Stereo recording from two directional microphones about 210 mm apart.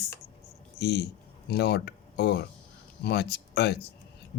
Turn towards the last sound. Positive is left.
turn(degrees=50)  # may be behind; listen again after turning